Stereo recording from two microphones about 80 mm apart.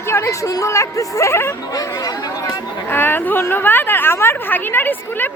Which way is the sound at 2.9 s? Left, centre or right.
Left.